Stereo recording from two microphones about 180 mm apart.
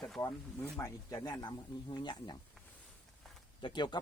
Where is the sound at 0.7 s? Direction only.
15° left (ahead or behind).